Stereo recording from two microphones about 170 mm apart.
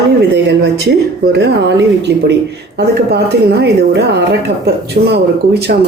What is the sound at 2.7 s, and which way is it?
A woman's voice, 70° right (ahead or behind).